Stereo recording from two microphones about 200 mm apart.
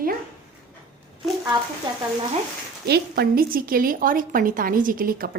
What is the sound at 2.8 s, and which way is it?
Speech, 55° right (ahead or behind).